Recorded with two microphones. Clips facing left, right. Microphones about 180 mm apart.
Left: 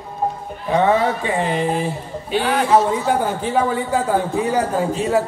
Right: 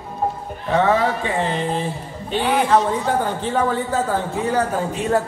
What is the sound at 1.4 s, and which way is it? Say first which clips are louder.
Speech: left 3 dB; 15° left (ahead or behind).